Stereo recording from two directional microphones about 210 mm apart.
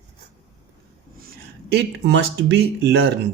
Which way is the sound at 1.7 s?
55° right (ahead or behind).